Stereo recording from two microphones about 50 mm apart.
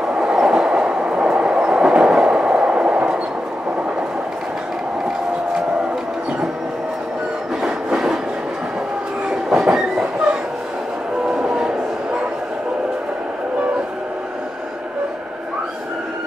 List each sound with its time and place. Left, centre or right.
0.1 s train: centre
7.6 s train: centre
9.3 s train: centre
11.4 s train: centre